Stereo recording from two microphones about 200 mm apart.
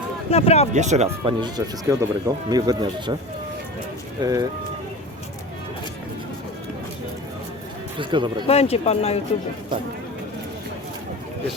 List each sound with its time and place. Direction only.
0.3 s speech: 30° left (ahead or behind)
0.7 s speech: 35° right (ahead or behind)
4.2 s speech: 20° right (ahead or behind)
7.9 s speech: 25° right (ahead or behind)
8.4 s speech: 30° left (ahead or behind)